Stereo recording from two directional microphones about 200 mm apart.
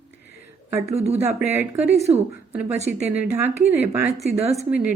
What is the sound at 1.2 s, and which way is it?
Speech, 10° right (ahead or behind).